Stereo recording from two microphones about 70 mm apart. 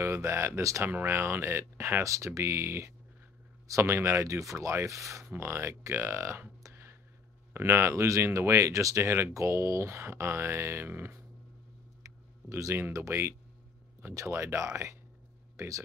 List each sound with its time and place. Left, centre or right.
0.0 s speech: right
0.8 s speech: right
6.7 s a sound: right
7.5 s speech: right
12.0 s a sound: right
13.1 s speech: right